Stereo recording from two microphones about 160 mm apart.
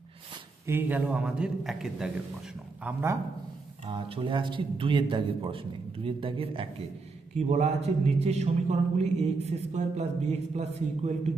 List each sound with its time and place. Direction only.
0.7 s a man's voice: 15° right (ahead or behind)
2.8 s a man's voice: 15° right (ahead or behind)
3.8 s a man's voice: 30° right (ahead or behind)